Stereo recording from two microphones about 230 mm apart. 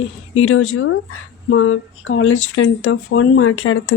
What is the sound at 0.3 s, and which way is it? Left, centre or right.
Speech, left.